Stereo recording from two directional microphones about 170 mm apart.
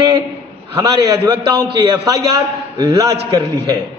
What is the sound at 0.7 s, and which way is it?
A man's voice, 25° right (ahead or behind).